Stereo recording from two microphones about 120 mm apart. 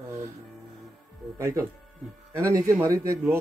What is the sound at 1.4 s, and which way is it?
Speech, 25° right (ahead or behind).